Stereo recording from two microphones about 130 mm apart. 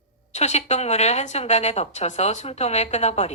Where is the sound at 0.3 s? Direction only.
60° left (ahead or behind).